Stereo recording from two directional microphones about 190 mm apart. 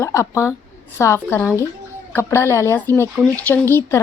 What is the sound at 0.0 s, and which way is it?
Speech, 15° left (ahead or behind).